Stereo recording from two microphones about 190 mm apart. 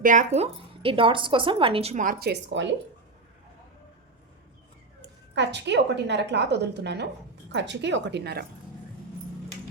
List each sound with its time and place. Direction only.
0.0 s speech: 40° right (ahead or behind); by 2.6 s 65° right (ahead or behind)
5.0 s a woman's voice: 65° right (ahead or behind)